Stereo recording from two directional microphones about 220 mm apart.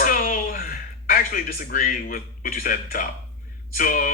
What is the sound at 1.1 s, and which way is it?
Speech, 40° left (ahead or behind).